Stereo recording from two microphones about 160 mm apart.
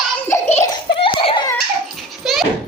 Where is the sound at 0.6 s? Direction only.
30° left (ahead or behind).